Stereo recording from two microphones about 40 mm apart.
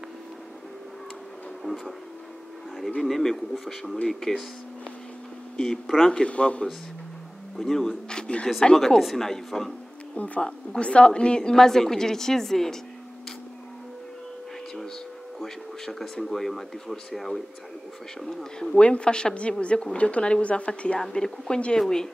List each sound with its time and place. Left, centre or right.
1.6 s speech: centre
3.0 s a woman's voice: centre
5.9 s a woman's voice: centre
6.2 s speech: left
7.5 s a woman's voice: centre
7.9 s speech: left
8.7 s a woman's voice: centre
10.1 s speech: left
10.4 s a woman's voice: left
15.4 s speech: centre
18.2 s a woman's voice: centre
18.8 s speech: left
21.0 s a woman's voice: centre